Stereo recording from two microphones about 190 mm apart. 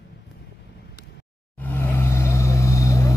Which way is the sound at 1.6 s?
10° left (ahead or behind).